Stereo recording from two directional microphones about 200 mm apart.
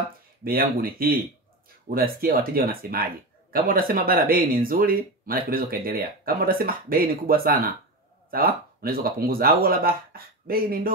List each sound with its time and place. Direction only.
0.4 s speech: 45° right (ahead or behind)